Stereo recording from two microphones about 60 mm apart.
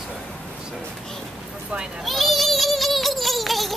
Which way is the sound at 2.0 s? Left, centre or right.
Centre.